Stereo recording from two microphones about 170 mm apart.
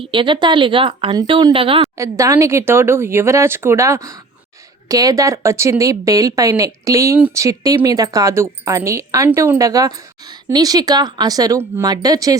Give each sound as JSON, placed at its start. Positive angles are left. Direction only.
{"t": 0.0, "sound": "speech", "side_deg": -30}
{"t": 2.0, "sound": "speech", "side_deg": -20}